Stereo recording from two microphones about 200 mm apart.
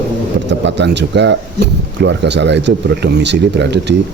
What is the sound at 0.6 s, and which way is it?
Speech, 60° right (ahead or behind).